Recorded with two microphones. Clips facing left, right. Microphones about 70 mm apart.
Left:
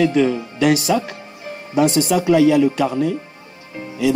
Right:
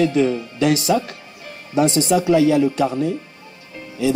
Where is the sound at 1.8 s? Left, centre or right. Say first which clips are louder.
Left 1 dB; left.